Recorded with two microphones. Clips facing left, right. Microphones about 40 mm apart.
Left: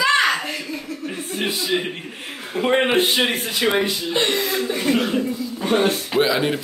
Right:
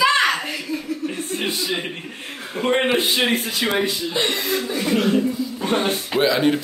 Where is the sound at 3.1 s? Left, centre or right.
Left.